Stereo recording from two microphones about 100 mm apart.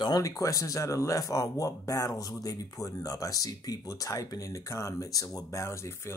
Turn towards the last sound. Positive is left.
turn(degrees=25)  # may be behind; listen again after turning